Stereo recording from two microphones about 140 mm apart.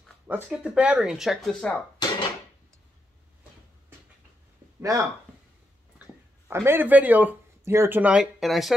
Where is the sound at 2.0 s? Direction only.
30° left (ahead or behind).